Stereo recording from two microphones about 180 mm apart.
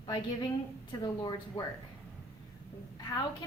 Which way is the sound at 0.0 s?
25° left (ahead or behind).